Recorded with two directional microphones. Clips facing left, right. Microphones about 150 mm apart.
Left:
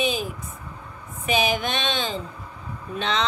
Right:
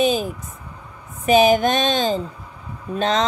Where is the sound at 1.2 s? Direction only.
40° right (ahead or behind).